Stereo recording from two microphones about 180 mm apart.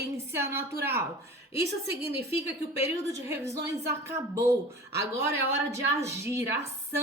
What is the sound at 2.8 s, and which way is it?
A woman's voice, 15° right (ahead or behind).